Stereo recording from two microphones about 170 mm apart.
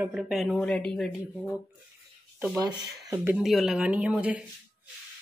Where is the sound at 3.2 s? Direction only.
10° right (ahead or behind).